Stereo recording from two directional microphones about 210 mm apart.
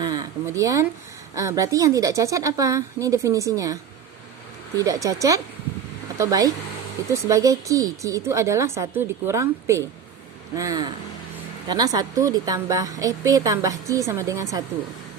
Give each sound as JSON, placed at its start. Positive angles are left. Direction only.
{"t": 0.0, "sound": "a sound", "side_deg": -15}
{"t": 1.4, "sound": "a woman's voice", "side_deg": -15}
{"t": 4.8, "sound": "a woman's voice", "side_deg": -15}